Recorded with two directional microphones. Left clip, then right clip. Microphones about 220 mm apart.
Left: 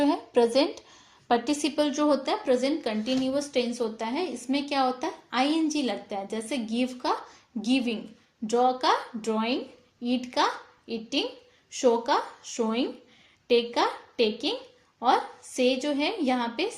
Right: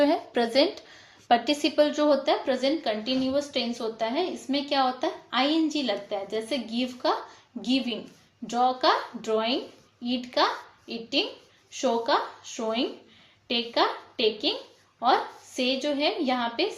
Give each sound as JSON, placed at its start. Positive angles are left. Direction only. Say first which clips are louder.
{"t": 0.0, "sound": "a woman's voice", "louder": "even", "side_deg": 25}